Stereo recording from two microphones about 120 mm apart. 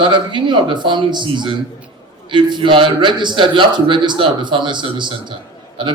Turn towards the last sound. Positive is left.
turn(degrees=-40)  # may be behind; listen again after turning